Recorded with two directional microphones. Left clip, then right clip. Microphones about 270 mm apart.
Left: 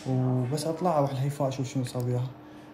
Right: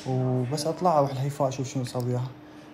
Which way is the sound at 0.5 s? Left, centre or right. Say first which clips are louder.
Right 4 dB; centre.